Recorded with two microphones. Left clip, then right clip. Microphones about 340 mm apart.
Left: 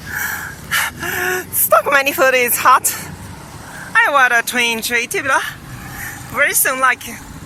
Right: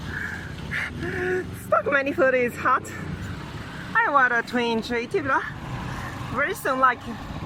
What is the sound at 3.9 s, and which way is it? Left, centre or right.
Speech, centre.